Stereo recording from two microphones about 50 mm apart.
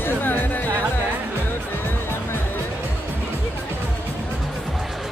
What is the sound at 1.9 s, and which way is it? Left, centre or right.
Music, left.